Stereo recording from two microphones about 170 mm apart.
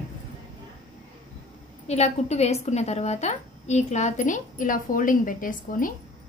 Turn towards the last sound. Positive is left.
turn(degrees=55)  # may be behind; listen again after turning